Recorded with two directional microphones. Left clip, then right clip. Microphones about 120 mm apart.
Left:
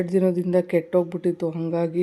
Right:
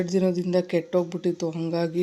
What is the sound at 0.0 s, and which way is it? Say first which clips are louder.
Speech: left 3 dB; 25° left (ahead or behind).